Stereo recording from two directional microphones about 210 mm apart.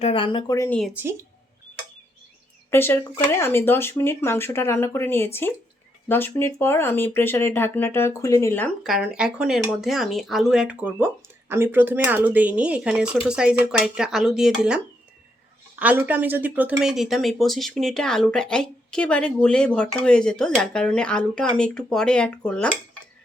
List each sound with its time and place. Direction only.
0.0 s speech: 25° left (ahead or behind)
0.9 s speech: 10° right (ahead or behind)
2.6 s speech: 10° left (ahead or behind)